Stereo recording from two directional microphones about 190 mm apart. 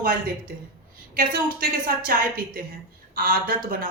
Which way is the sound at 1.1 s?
50° right (ahead or behind).